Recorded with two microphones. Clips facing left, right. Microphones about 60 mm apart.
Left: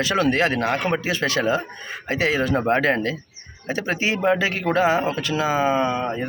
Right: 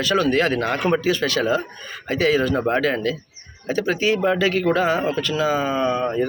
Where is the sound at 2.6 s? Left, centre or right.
Left.